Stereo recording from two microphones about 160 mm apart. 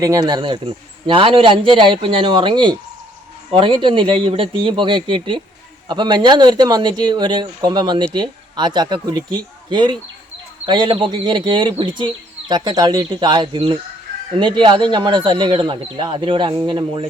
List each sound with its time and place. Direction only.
0.0 s speech: 20° right (ahead or behind)